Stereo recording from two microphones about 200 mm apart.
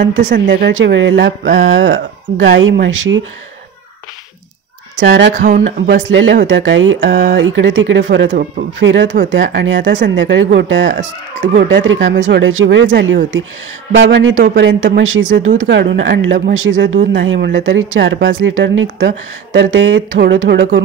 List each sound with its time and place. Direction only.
0.5 s speech: 55° right (ahead or behind)
2.3 s speech: 50° right (ahead or behind)
2.6 s speech: 70° right (ahead or behind)
4.9 s speech: 60° right (ahead or behind)
5.3 s speech: 40° right (ahead or behind)
6.0 s speech: 65° right (ahead or behind)
8.3 s speech: 45° right (ahead or behind)
8.7 s speech: 65° right (ahead or behind)
10.9 s speech: 40° right (ahead or behind)
11.5 s speech: 65° right (ahead or behind)
18.4 s speech: 70° right (ahead or behind)